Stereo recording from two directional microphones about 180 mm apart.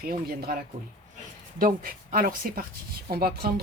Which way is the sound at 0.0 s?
60° right (ahead or behind).